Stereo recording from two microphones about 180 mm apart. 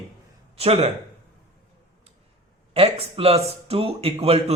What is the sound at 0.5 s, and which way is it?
Speech, 35° right (ahead or behind).